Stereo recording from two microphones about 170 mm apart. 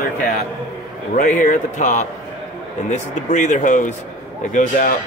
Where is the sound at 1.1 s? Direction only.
50° left (ahead or behind).